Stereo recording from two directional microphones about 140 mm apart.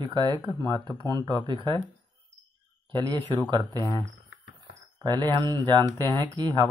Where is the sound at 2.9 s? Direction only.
30° right (ahead or behind).